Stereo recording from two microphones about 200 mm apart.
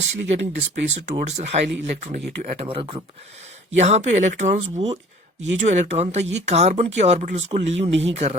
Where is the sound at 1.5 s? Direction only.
30° right (ahead or behind).